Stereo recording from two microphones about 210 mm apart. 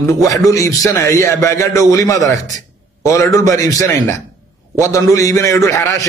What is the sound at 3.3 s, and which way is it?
A man's voice, 15° left (ahead or behind).